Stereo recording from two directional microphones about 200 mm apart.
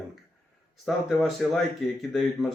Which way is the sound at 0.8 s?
Centre (ahead or behind).